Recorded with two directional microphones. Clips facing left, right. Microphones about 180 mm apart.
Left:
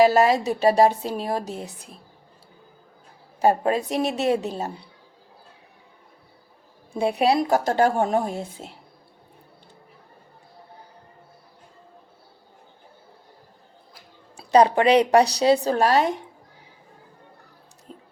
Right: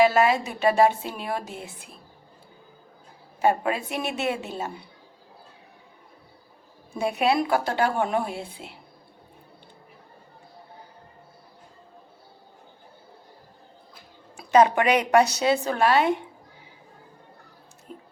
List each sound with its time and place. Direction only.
0.0 s a woman's voice: 40° left (ahead or behind)
3.4 s a woman's voice: 35° left (ahead or behind)
6.9 s a woman's voice: 30° left (ahead or behind)
14.5 s a woman's voice: 35° left (ahead or behind)
17.9 s music: 35° left (ahead or behind)